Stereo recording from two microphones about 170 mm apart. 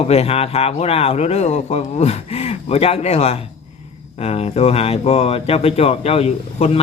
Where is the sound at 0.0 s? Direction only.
35° left (ahead or behind).